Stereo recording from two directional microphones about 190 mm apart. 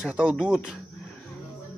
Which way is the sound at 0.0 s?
5° right (ahead or behind).